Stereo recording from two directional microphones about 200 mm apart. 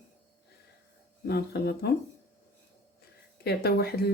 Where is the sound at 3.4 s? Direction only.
55° left (ahead or behind).